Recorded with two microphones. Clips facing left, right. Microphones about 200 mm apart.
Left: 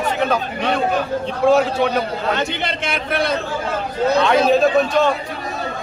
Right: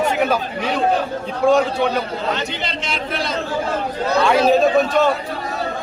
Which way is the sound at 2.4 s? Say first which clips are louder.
Left 3 dB; 55° left (ahead or behind).